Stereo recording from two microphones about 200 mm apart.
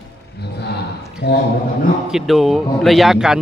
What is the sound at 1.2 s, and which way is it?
Speech, 60° left (ahead or behind).